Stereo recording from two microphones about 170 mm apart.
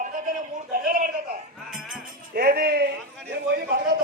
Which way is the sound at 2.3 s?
65° right (ahead or behind).